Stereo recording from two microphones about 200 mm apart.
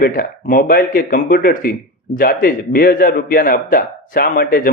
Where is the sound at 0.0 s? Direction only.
45° left (ahead or behind).